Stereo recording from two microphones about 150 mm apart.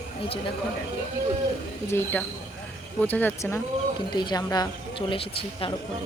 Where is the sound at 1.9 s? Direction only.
15° left (ahead or behind).